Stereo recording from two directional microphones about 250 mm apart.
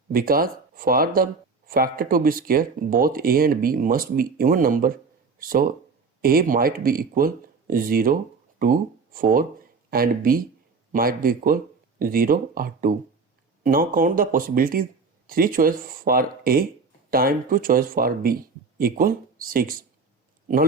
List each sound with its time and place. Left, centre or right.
0.1 s speech: right